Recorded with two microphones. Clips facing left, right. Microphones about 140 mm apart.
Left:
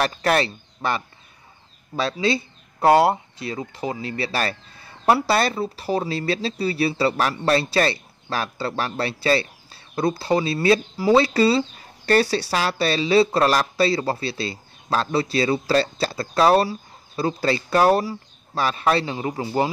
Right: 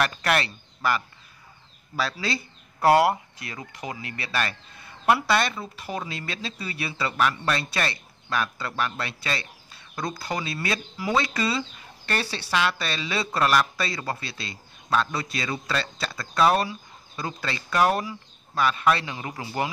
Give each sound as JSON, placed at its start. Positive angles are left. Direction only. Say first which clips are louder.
{"t": 0.0, "sound": "speech", "louder": "left 4 dB", "side_deg": 30}